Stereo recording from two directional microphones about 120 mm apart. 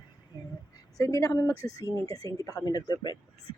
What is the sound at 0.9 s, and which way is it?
A woman's voice, 25° left (ahead or behind).